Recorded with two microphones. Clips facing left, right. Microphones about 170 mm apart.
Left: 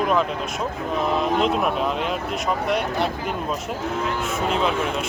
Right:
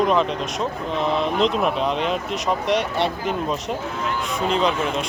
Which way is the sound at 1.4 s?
5° left (ahead or behind).